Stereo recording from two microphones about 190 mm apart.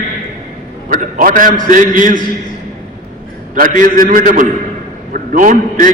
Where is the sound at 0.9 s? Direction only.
45° right (ahead or behind).